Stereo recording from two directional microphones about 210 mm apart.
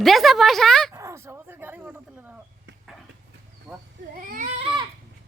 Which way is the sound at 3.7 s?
Centre (ahead or behind).